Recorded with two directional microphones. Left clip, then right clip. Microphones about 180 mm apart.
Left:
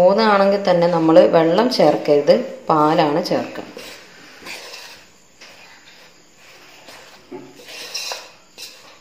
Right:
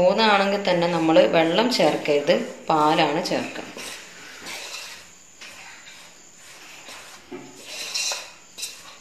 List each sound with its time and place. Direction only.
0.0 s speech: 40° left (ahead or behind)